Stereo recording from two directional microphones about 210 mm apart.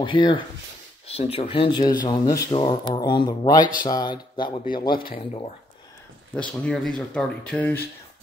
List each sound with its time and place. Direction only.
0.0 s speech: 25° left (ahead or behind)
6.3 s speech: 5° left (ahead or behind)